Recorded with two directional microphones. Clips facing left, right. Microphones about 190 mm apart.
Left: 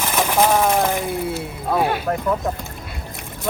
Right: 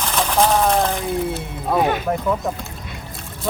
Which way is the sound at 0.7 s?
15° left (ahead or behind).